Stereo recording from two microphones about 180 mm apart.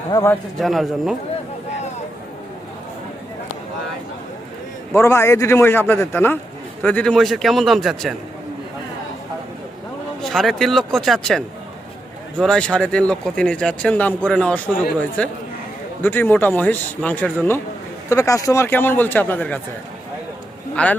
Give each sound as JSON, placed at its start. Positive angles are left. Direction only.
{"t": 0.1, "sound": "speech", "side_deg": 15}
{"t": 0.6, "sound": "speech", "side_deg": 0}
{"t": 4.9, "sound": "speech", "side_deg": 15}
{"t": 10.2, "sound": "speech", "side_deg": 0}
{"t": 20.8, "sound": "speech", "side_deg": 5}